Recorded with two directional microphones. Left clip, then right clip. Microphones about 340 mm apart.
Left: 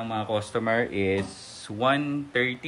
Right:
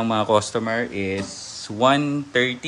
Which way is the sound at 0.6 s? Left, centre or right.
Centre.